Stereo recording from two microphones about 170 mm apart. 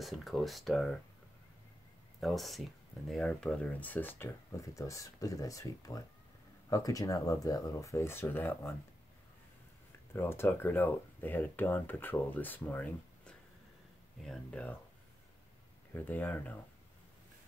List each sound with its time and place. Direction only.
0.0 s speech: centre (ahead or behind)
2.1 s speech: centre (ahead or behind)
10.1 s speech: 15° left (ahead or behind)
15.9 s speech: 10° left (ahead or behind)